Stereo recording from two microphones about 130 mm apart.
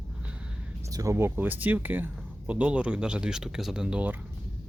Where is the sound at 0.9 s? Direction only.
25° right (ahead or behind).